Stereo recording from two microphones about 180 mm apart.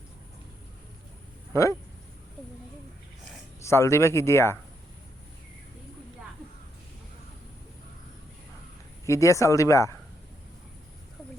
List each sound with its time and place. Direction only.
1.5 s speech: 15° left (ahead or behind)
3.6 s speech: 15° left (ahead or behind)
9.0 s speech: 15° left (ahead or behind)